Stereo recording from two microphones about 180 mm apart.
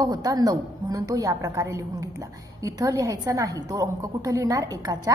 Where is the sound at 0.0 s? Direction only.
20° right (ahead or behind).